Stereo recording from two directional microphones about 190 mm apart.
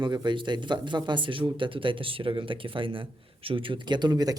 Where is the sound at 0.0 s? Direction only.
25° right (ahead or behind).